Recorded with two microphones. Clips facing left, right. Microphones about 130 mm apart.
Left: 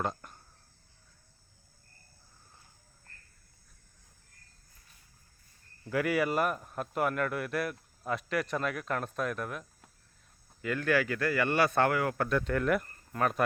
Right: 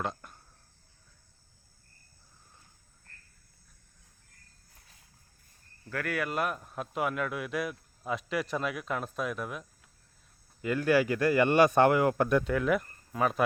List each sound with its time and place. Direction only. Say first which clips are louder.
0.0 s a sound: left 1 dB; centre (ahead or behind)
5.9 s a man's voice: left 4 dB; 10° left (ahead or behind); by 12.5 s 15° right (ahead or behind)
12.5 s speech: right 1 dB; centre (ahead or behind)